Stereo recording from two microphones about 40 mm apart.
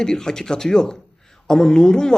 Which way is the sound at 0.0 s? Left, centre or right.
Centre.